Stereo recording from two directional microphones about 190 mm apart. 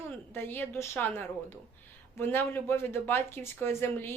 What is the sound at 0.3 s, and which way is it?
Speech, 10° left (ahead or behind).